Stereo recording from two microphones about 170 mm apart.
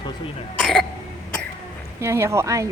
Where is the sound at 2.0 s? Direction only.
15° right (ahead or behind).